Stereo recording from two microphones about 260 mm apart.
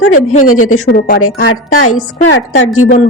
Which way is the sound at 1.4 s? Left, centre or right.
Left.